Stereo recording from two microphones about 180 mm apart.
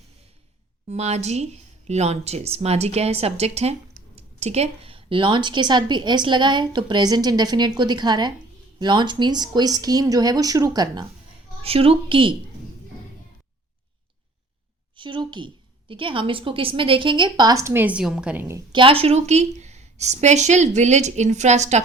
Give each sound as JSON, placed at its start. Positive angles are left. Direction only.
{"t": 0.9, "sound": "a woman's voice", "side_deg": -35}
{"t": 11.6, "sound": "a woman's voice", "side_deg": -30}
{"t": 14.9, "sound": "a woman's voice", "side_deg": -25}
{"t": 18.7, "sound": "a woman's voice", "side_deg": -30}